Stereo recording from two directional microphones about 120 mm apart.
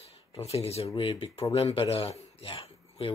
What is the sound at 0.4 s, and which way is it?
A man's voice, 60° left (ahead or behind).